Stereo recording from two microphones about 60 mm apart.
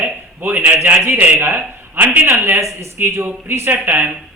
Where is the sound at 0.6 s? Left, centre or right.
Right.